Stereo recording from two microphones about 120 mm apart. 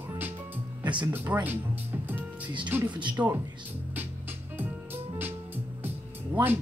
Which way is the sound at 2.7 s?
15° right (ahead or behind).